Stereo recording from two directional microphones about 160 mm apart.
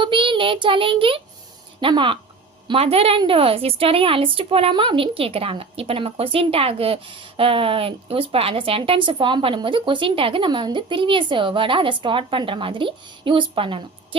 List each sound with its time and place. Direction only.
0.0 s a woman's voice: 30° right (ahead or behind)